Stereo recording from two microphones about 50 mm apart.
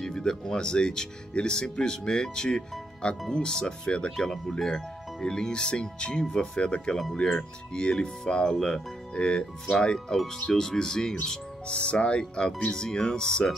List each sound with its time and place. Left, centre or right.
0.0 s speech: centre